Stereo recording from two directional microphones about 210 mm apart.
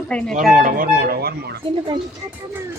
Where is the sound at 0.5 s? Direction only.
40° right (ahead or behind).